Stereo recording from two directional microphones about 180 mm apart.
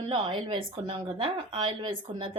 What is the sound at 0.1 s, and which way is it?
Speech, 30° right (ahead or behind).